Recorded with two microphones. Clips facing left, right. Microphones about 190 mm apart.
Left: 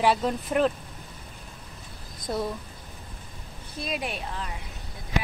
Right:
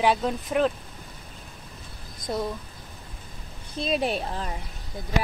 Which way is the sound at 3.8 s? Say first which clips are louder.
Right 6 dB; 30° right (ahead or behind).